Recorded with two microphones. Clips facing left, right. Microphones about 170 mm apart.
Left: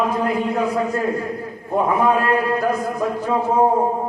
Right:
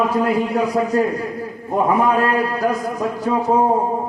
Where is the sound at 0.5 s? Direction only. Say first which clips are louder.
Right 3 dB; 40° right (ahead or behind).